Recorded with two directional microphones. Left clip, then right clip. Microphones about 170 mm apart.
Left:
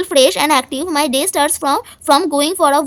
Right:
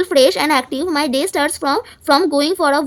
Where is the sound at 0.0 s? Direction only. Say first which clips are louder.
Left 1 dB; 35° left (ahead or behind).